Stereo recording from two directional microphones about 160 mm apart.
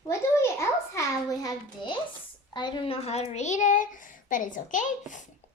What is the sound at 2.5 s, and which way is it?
A child's voice, 30° left (ahead or behind).